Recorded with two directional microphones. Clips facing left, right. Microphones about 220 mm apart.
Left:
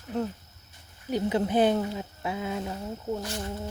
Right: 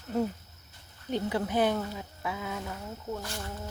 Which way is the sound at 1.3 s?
25° left (ahead or behind).